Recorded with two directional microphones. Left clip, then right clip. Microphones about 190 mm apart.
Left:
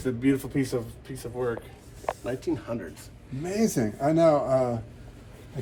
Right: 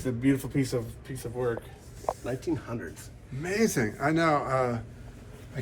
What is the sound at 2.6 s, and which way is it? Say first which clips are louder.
Speech: left 3 dB; 45° left (ahead or behind).